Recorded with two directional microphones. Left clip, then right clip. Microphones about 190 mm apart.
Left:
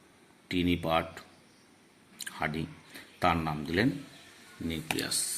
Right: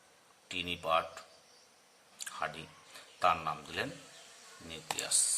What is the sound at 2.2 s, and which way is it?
Chewing, 15° left (ahead or behind).